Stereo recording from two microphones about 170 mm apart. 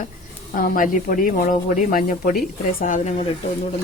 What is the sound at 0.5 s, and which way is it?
Speech, 55° left (ahead or behind).